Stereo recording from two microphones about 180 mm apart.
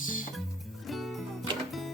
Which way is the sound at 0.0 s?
50° left (ahead or behind).